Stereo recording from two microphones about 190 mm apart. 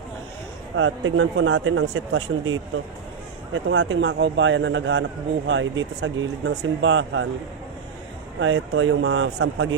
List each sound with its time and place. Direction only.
0.8 s speech: 90° right
8.4 s speech: 90° right